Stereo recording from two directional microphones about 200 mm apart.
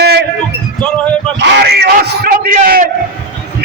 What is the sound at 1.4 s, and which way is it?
A man's voice, 55° right (ahead or behind).